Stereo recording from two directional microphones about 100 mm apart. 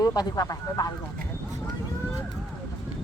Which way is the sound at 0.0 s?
40° left (ahead or behind).